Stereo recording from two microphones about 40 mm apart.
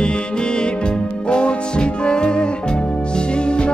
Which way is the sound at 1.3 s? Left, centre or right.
Left.